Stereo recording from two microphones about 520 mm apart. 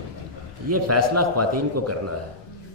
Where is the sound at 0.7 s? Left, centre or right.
Right.